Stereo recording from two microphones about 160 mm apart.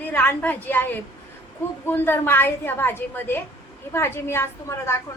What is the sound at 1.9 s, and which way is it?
A woman's voice, 15° left (ahead or behind).